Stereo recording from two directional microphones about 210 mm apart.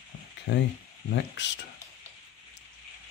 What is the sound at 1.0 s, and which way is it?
Speech, 60° left (ahead or behind).